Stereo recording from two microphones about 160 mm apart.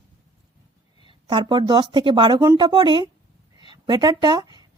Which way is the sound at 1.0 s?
30° right (ahead or behind).